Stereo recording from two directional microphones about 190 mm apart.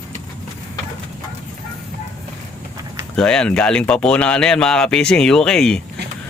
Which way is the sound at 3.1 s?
5° left (ahead or behind).